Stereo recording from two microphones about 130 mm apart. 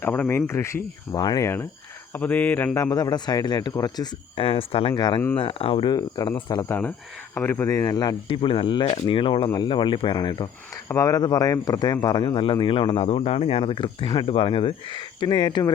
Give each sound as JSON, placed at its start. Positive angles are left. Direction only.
{"t": 0.0, "sound": "speech", "side_deg": 15}
{"t": 2.9, "sound": "speech", "side_deg": 30}
{"t": 5.4, "sound": "speech", "side_deg": 45}
{"t": 5.9, "sound": "speech", "side_deg": 30}
{"t": 6.6, "sound": "speech", "side_deg": 15}
{"t": 7.7, "sound": "speech", "side_deg": 30}
{"t": 8.3, "sound": "speech", "side_deg": 45}